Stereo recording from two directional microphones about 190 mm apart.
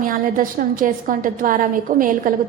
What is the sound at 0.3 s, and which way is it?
A woman's voice, 45° right (ahead or behind).